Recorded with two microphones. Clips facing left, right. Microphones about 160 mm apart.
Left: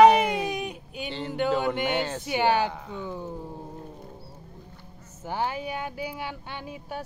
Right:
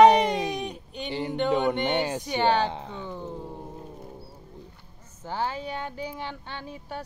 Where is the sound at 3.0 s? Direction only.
10° left (ahead or behind).